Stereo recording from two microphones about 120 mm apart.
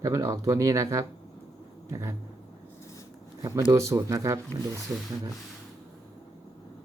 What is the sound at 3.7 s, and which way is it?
Speech, 25° right (ahead or behind).